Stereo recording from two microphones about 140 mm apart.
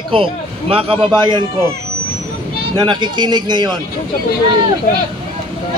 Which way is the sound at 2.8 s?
30° right (ahead or behind).